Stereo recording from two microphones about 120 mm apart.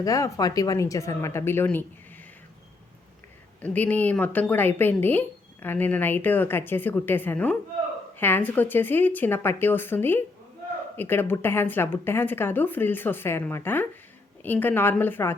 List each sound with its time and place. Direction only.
0.0 s speech: 30° left (ahead or behind)
3.6 s a woman's voice: 10° left (ahead or behind)